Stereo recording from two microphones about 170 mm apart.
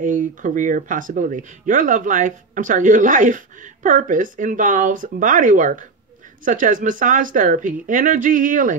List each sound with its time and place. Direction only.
0.0 s speech: 50° right (ahead or behind)